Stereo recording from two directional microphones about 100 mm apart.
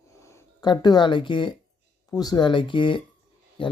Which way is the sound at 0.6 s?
45° left (ahead or behind).